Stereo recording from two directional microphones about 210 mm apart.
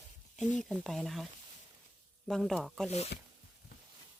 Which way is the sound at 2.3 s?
Centre (ahead or behind).